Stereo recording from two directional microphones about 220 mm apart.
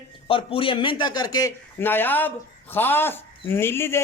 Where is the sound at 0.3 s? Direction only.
25° left (ahead or behind).